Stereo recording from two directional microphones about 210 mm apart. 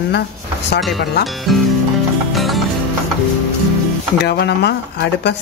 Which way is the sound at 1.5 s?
Centre (ahead or behind).